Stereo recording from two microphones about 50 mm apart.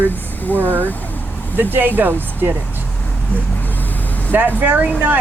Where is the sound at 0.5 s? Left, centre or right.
Right.